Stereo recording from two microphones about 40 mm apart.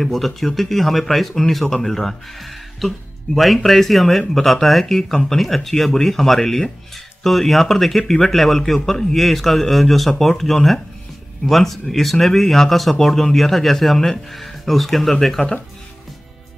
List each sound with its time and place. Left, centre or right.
0.0 s speech: centre